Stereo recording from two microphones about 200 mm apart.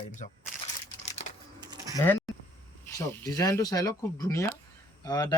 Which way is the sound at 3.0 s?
15° left (ahead or behind).